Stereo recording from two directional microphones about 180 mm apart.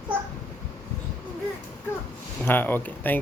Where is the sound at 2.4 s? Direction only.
10° left (ahead or behind).